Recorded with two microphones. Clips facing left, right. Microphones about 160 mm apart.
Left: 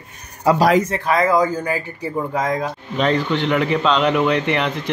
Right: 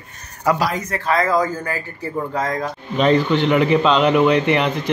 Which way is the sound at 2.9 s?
5° right (ahead or behind).